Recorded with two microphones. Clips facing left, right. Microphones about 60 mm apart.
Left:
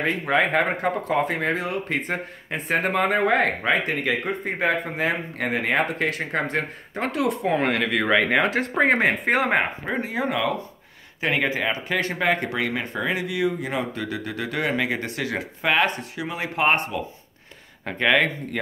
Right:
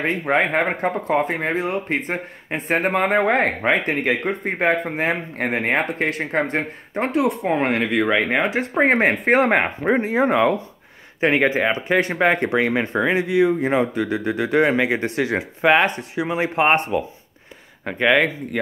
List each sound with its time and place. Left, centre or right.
0.3 s speech: right
8.0 s speech: centre
8.8 s speech: right
9.9 s speech: right
17.8 s speech: centre